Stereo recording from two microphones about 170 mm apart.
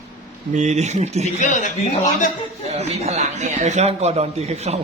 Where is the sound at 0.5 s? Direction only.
45° right (ahead or behind).